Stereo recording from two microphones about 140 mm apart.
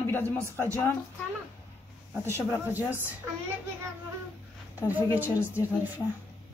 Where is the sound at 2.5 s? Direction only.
20° left (ahead or behind).